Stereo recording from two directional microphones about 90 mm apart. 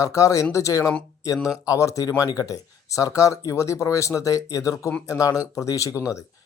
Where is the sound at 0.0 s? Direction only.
35° left (ahead or behind).